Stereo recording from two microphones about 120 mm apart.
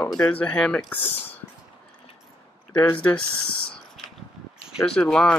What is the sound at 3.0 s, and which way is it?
Speech, 10° left (ahead or behind).